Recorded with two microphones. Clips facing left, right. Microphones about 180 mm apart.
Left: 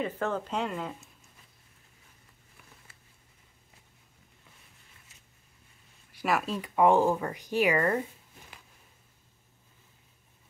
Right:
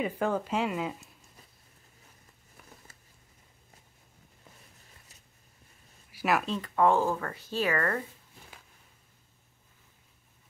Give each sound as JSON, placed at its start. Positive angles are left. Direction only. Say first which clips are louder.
{"t": 0.0, "sound": "speech", "louder": "right 2 dB", "side_deg": -10}
{"t": 6.1, "sound": "speech", "louder": "right 1 dB", "side_deg": 0}